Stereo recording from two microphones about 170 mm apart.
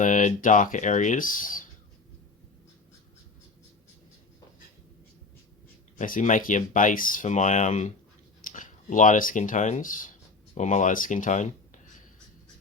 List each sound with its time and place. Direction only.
0.0 s speech: 45° left (ahead or behind)
6.0 s speech: 50° left (ahead or behind)